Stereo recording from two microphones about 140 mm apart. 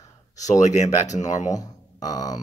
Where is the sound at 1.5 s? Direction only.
25° left (ahead or behind).